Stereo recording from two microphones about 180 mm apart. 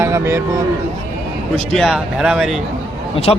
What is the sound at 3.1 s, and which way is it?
Speech, 30° left (ahead or behind).